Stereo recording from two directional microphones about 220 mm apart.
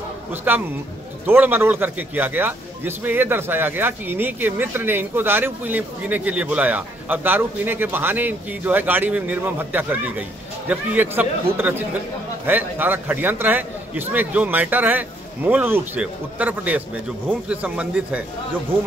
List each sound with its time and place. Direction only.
0.5 s speech: 10° right (ahead or behind)